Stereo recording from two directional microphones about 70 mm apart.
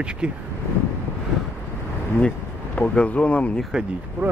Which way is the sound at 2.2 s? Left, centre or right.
Centre.